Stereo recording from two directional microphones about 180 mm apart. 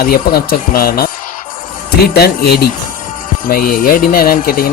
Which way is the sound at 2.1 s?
60° left (ahead or behind).